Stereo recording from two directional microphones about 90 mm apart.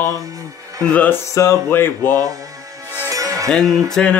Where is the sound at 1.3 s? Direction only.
30° left (ahead or behind).